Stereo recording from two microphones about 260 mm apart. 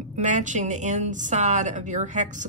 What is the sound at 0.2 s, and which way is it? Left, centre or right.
A woman's voice, right.